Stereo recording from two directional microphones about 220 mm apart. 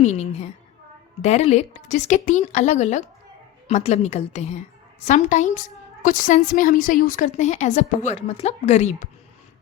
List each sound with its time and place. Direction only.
0.0 s a woman's voice: 30° left (ahead or behind)